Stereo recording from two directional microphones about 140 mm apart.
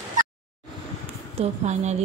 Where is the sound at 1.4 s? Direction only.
55° right (ahead or behind).